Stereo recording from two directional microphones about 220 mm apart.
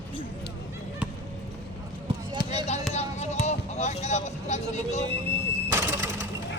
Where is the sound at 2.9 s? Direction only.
30° left (ahead or behind).